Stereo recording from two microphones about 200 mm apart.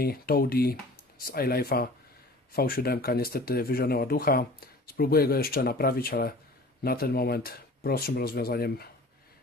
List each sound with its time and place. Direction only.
0.0 s speech: 50° left (ahead or behind)